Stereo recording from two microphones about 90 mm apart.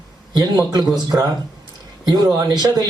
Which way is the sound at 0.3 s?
45° right (ahead or behind).